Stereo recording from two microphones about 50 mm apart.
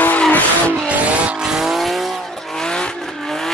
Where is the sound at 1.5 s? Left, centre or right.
Centre.